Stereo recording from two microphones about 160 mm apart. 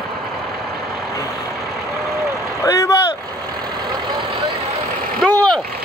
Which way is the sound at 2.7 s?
20° left (ahead or behind).